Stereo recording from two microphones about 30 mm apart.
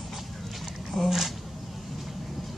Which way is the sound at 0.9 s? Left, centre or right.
Left.